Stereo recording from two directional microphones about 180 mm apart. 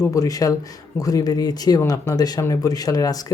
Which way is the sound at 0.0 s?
20° left (ahead or behind).